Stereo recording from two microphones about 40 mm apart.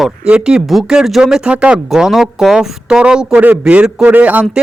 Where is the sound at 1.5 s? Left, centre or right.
Right.